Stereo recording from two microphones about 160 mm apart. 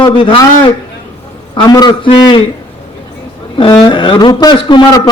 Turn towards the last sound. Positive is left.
turn(degrees=25)  # may be behind; listen again after turning